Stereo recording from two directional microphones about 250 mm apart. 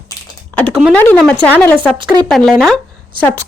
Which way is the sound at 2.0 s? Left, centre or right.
Centre.